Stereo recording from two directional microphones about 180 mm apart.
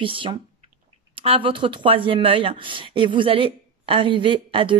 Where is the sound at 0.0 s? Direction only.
30° right (ahead or behind).